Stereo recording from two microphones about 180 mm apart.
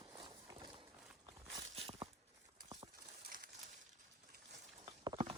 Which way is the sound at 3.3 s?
50° right (ahead or behind).